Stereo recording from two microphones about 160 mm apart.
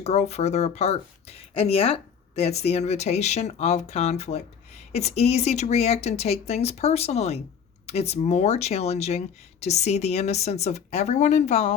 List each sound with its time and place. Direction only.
0.0 s speech: 40° left (ahead or behind)